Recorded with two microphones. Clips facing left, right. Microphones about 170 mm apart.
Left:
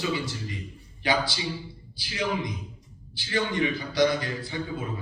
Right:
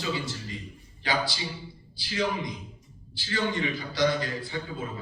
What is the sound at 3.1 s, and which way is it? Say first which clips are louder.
A man's voice: left 2 dB; 20° left (ahead or behind).